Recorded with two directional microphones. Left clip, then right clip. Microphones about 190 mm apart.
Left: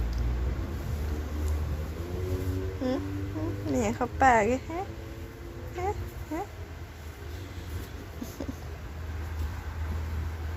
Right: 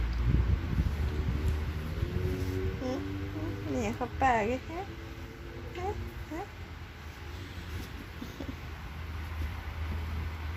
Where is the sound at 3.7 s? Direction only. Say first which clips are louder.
Left 5 dB; 20° left (ahead or behind).